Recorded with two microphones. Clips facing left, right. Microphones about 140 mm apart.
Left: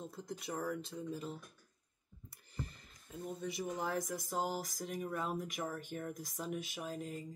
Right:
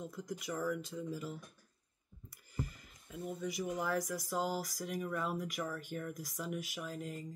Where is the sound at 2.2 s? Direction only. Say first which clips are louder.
Right 4 dB; 25° left (ahead or behind).